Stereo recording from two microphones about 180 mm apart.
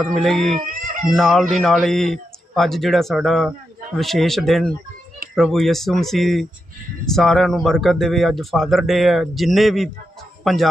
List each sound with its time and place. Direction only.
0.0 s a man's voice: centre (ahead or behind)